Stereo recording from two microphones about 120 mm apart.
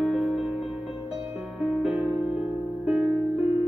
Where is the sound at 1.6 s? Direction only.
5° right (ahead or behind).